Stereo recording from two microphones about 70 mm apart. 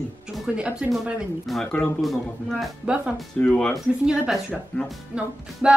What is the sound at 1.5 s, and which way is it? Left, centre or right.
Speech, centre.